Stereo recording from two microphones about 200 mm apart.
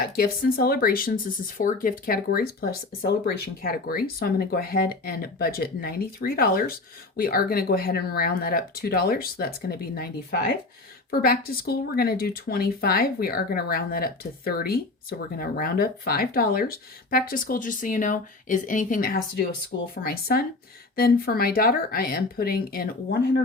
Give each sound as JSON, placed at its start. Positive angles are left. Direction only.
{"t": 0.2, "sound": "speech", "side_deg": 50}